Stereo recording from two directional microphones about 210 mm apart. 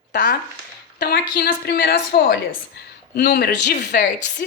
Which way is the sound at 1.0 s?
50° left (ahead or behind).